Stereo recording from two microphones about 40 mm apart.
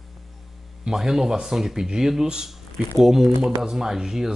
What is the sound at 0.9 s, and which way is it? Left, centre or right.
Speech, centre.